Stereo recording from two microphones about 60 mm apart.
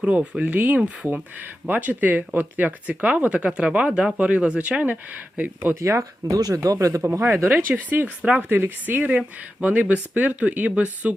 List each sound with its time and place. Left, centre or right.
0.0 s speech: right
5.8 s speech: right
7.0 s speech: right